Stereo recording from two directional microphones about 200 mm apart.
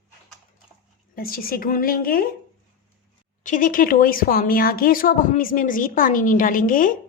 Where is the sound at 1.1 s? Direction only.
45° left (ahead or behind).